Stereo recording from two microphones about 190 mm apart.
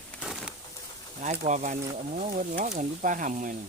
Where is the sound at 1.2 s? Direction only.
40° right (ahead or behind).